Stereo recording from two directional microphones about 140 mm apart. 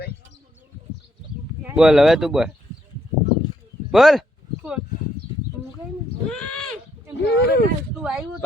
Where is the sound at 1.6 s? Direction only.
10° right (ahead or behind).